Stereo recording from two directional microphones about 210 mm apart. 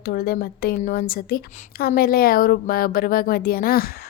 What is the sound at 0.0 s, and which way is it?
A woman's voice, 45° left (ahead or behind).